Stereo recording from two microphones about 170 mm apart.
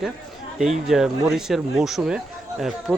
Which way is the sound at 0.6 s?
Centre (ahead or behind).